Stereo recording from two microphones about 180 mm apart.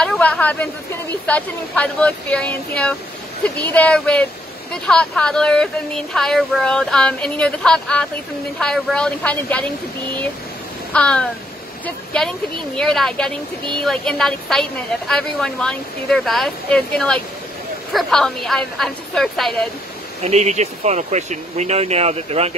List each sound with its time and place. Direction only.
0.0 s a woman's voice: 5° left (ahead or behind)
10.9 s a woman's voice: 5° left (ahead or behind)
20.2 s speech: 35° right (ahead or behind)